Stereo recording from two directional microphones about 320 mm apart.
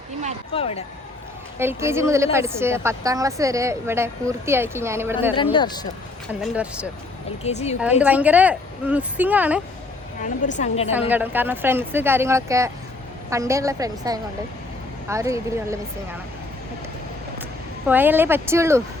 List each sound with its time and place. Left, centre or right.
0.5 s a woman's voice: centre
1.5 s a woman's voice: centre
5.3 s speech: centre
6.4 s a woman's voice: centre
7.4 s a woman's voice: centre
7.8 s a woman's voice: centre
10.2 s a woman's voice: left
11.1 s a woman's voice: centre
17.8 s a woman's voice: centre